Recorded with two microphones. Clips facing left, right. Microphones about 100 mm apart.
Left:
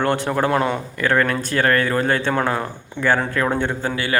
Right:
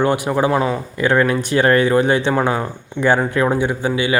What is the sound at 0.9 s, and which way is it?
Speech, 15° right (ahead or behind).